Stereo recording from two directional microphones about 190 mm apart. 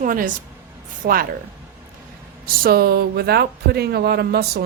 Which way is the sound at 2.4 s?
50° right (ahead or behind).